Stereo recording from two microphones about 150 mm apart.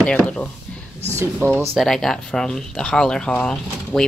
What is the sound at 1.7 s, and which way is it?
Speech, centre (ahead or behind).